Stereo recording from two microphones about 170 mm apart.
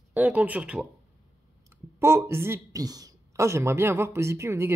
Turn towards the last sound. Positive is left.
turn(degrees=-15)  # may be behind; listen again after turning